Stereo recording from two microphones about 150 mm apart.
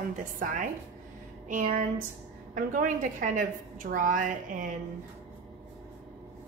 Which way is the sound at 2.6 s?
65° right (ahead or behind).